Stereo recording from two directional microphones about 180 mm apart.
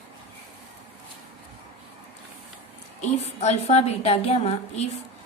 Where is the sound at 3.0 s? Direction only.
40° left (ahead or behind).